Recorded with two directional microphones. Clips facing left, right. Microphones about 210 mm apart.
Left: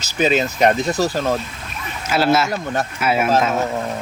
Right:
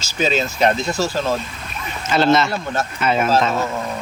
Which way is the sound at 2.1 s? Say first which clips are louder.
Right 1 dB; 5° left (ahead or behind).